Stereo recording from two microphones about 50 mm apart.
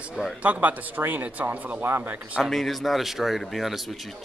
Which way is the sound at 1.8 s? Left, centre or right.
Right.